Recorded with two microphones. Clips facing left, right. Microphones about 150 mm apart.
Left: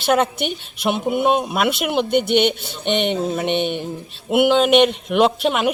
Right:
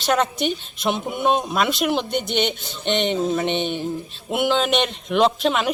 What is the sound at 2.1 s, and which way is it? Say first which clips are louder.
Speech: left 6 dB; 55° left (ahead or behind).